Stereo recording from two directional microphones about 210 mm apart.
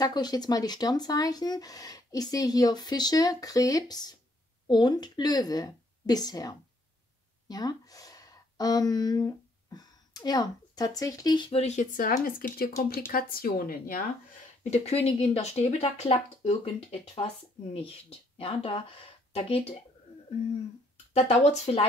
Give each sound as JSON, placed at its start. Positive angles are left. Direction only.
{"t": 0.0, "sound": "speech", "side_deg": 20}
{"t": 14.6, "sound": "speech", "side_deg": 30}
{"t": 21.1, "sound": "speech", "side_deg": 30}